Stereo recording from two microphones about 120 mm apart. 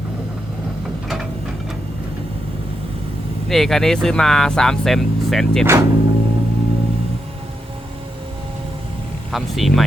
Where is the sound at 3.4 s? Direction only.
5° left (ahead or behind).